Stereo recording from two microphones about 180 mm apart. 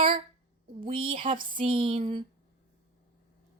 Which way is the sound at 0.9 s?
30° right (ahead or behind).